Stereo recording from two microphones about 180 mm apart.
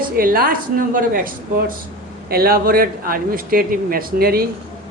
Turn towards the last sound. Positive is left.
turn(degrees=-55)  # may be behind; listen again after turning